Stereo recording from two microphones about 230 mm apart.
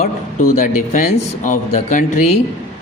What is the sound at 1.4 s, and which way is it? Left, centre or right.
Speech, left.